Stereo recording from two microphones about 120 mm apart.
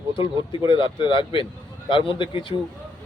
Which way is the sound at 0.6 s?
45° left (ahead or behind).